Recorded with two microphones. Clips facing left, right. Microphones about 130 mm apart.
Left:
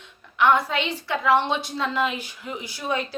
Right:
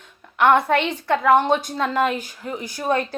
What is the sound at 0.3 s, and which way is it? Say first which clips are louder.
A woman's voice: right 4 dB; 55° right (ahead or behind).